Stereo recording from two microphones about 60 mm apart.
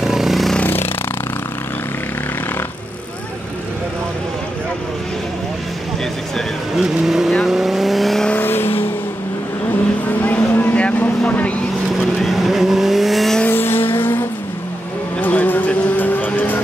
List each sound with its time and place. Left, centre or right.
0.0 s vehicle: centre
0.6 s a sound: left
6.8 s vehicle: centre
8.4 s vehicle: left
10.0 s vehicle: left
12.0 s vehicle: centre
13.5 s vehicle: left